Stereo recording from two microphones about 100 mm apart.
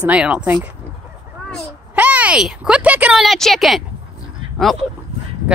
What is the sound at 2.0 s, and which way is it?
Speech, 15° right (ahead or behind).